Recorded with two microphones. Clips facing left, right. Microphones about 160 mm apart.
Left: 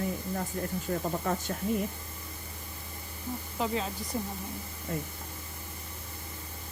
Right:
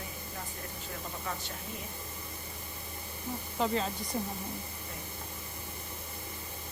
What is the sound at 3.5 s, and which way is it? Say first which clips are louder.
Speech: right 1 dB; centre (ahead or behind).